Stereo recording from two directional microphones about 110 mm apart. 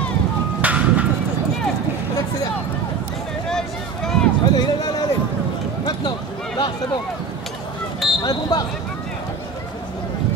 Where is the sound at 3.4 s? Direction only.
5° left (ahead or behind).